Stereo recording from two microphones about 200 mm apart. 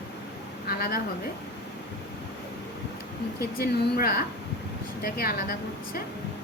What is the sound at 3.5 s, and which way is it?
A woman's voice, 45° left (ahead or behind).